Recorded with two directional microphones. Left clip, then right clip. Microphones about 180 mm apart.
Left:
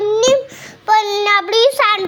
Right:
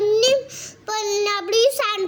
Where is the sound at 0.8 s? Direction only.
25° right (ahead or behind).